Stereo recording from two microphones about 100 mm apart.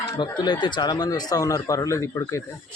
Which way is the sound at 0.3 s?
50° left (ahead or behind).